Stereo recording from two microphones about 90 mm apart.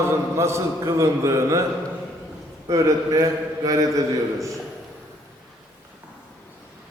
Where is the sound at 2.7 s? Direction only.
40° right (ahead or behind).